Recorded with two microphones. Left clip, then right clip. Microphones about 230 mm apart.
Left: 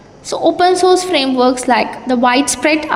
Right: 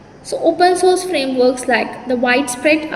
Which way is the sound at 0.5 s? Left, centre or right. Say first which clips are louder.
Left 2 dB; left.